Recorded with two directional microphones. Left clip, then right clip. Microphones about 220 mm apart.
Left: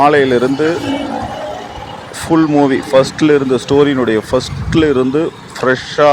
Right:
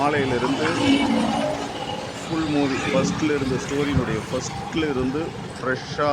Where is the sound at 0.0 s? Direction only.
35° left (ahead or behind).